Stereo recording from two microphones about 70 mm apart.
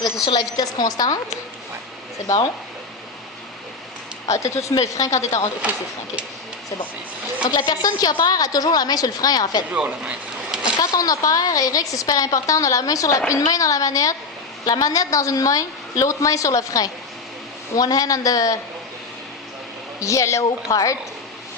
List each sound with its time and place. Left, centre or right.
0.3 s a woman's voice: left
2.2 s a woman's voice: left
4.3 s a woman's voice: left
7.5 s a woman's voice: left
9.7 s speech: centre
10.8 s a woman's voice: left
20.0 s a woman's voice: left